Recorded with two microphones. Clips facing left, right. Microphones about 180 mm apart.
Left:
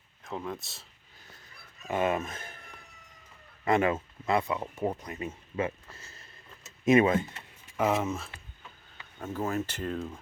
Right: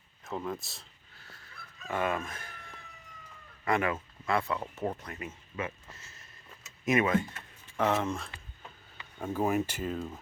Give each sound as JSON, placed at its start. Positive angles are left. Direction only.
{"t": 0.3, "sound": "speech", "side_deg": 0}
{"t": 1.2, "sound": "fowl", "side_deg": 20}
{"t": 1.9, "sound": "speech", "side_deg": 20}
{"t": 3.6, "sound": "speech", "side_deg": 25}
{"t": 5.2, "sound": "speech", "side_deg": 30}
{"t": 7.8, "sound": "speech", "side_deg": 5}
{"t": 9.2, "sound": "speech", "side_deg": -15}